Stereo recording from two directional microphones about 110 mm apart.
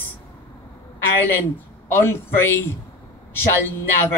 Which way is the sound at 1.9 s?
20° left (ahead or behind).